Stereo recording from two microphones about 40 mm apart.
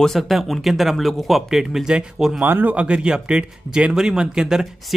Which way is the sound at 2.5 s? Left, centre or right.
Right.